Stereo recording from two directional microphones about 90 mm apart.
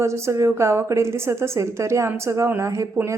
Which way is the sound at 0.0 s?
30° right (ahead or behind).